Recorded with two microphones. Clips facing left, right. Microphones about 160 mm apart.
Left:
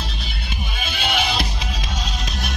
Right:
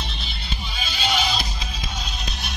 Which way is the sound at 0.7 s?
55° left (ahead or behind).